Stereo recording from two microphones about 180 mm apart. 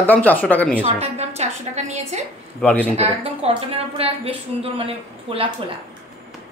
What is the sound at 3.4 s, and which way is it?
A woman's voice, 35° right (ahead or behind).